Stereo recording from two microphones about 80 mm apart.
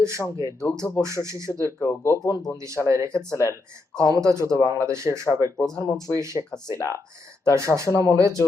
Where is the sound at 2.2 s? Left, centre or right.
Left.